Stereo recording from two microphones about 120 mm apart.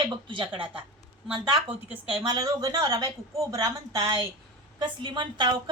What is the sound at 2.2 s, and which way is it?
A woman's voice, 30° right (ahead or behind).